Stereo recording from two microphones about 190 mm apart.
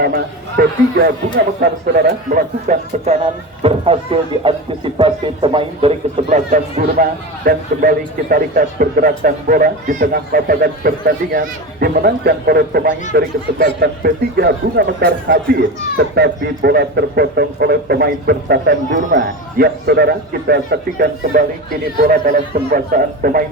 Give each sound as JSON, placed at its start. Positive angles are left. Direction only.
{"t": 0.0, "sound": "a man's voice", "side_deg": -55}
{"t": 2.0, "sound": "a man's voice", "side_deg": -45}
{"t": 3.2, "sound": "speech", "side_deg": -30}
{"t": 7.0, "sound": "a man's voice", "side_deg": -50}